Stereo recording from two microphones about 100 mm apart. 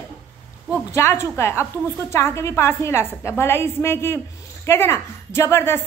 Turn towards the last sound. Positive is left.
turn(degrees=25)  # may be behind; listen again after turning